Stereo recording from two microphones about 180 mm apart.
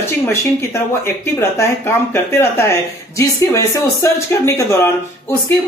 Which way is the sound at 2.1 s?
15° left (ahead or behind).